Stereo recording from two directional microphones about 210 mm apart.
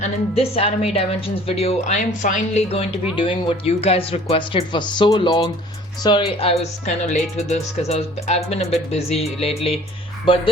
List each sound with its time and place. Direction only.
0.0 s speech: 30° left (ahead or behind)
6.8 s speech: 35° left (ahead or behind)